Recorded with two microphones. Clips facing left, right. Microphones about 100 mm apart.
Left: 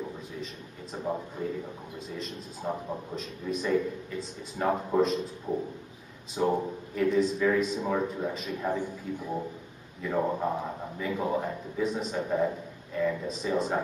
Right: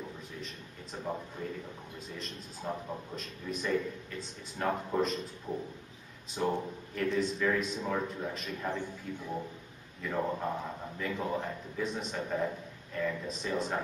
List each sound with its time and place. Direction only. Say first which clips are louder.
0.9 s a man's voice: left 5 dB; 10° left (ahead or behind)
6.3 s a man's voice: left 5 dB; 5° left (ahead or behind)
10.2 s a man's voice: left 5 dB; 10° left (ahead or behind)
13.3 s a man's voice: left 5 dB; centre (ahead or behind)